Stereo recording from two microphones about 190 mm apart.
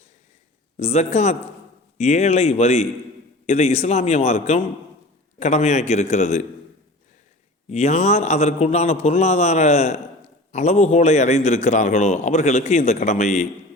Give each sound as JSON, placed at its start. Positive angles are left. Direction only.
{"t": 0.8, "sound": "a man's voice", "side_deg": 35}
{"t": 7.7, "sound": "a man's voice", "side_deg": 35}